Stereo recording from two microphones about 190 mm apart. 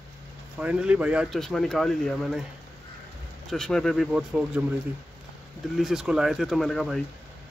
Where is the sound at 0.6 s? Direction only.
5° right (ahead or behind).